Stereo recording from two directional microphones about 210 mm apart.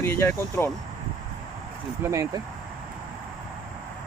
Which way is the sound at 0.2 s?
10° left (ahead or behind).